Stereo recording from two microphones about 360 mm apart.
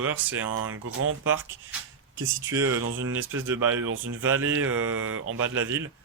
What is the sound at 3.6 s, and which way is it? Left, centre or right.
Speech, right.